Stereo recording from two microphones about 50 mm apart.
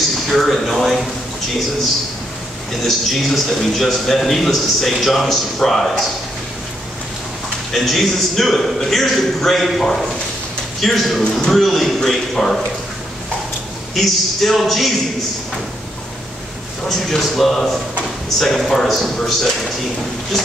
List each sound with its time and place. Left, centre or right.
0.3 s a man's voice: centre
3.1 s a man's voice: centre
7.7 s a man's voice: centre
13.9 s a man's voice: centre
16.9 s a man's voice: centre